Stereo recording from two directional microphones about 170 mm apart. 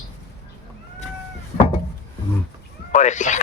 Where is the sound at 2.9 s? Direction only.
45° left (ahead or behind).